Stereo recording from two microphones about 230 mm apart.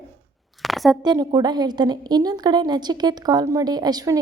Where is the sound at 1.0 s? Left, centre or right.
Centre.